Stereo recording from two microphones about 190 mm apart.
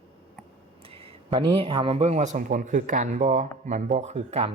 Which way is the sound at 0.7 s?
30° right (ahead or behind).